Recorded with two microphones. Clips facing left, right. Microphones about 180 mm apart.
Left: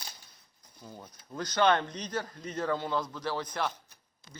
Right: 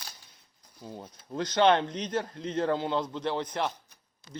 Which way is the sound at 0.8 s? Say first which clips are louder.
Right 5 dB; 25° right (ahead or behind).